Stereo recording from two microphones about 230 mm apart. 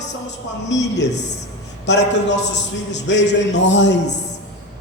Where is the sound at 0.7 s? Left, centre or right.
Left.